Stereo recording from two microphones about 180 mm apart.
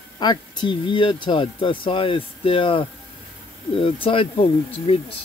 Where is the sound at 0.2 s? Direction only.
25° left (ahead or behind).